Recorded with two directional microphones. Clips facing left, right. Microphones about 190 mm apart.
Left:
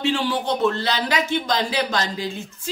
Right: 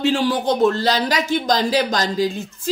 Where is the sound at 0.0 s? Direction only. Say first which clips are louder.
Right 4 dB; 40° right (ahead or behind).